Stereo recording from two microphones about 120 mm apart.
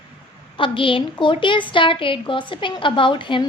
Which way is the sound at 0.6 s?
45° left (ahead or behind).